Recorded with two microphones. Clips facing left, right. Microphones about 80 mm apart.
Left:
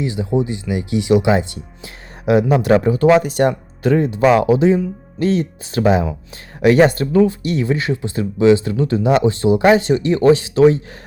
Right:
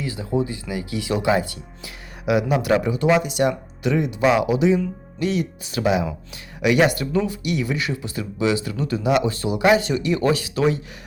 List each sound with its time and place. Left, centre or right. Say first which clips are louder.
0.0 s speech: left 5 dB; left